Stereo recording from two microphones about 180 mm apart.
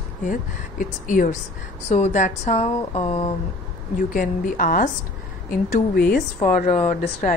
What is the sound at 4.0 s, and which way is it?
Speech, 45° left (ahead or behind).